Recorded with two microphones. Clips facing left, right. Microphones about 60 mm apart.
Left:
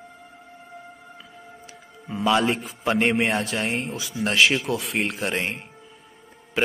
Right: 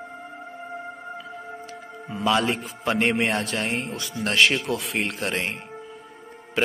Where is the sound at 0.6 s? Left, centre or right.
Right.